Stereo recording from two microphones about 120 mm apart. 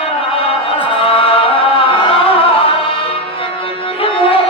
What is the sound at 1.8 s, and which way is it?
Music, 50° left (ahead or behind).